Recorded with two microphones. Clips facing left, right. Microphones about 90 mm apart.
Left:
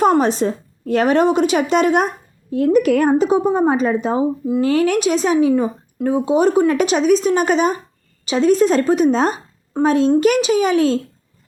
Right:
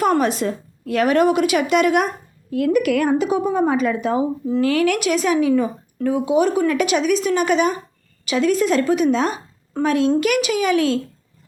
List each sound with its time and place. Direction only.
0.0 s speech: 30° left (ahead or behind)